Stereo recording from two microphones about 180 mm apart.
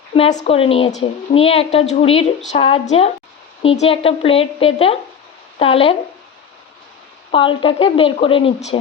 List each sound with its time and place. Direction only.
0.1 s a woman's voice: 35° left (ahead or behind)
7.3 s a woman's voice: 30° left (ahead or behind)